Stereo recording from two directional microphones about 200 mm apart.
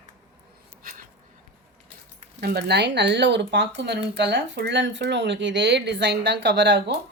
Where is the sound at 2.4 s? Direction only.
50° right (ahead or behind).